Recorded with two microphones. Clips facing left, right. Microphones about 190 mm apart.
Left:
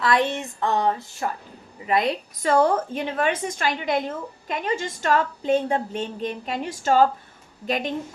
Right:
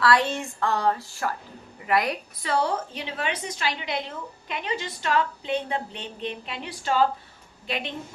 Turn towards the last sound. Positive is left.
turn(degrees=45)  # may be behind; listen again after turning